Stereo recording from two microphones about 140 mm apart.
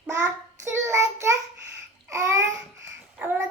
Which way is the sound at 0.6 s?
20° right (ahead or behind).